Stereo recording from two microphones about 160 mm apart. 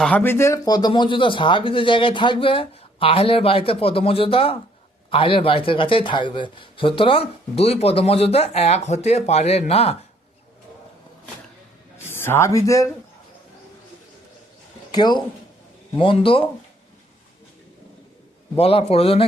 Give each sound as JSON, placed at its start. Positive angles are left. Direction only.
{"t": 0.0, "sound": "speech", "side_deg": 10}
{"t": 11.9, "sound": "speech", "side_deg": 15}
{"t": 14.9, "sound": "speech", "side_deg": 25}
{"t": 18.5, "sound": "speech", "side_deg": 40}